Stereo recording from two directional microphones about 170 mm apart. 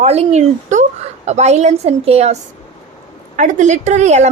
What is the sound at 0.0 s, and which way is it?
A woman's voice, 40° right (ahead or behind).